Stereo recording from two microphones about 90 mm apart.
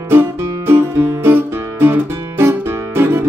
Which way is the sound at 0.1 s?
25° right (ahead or behind).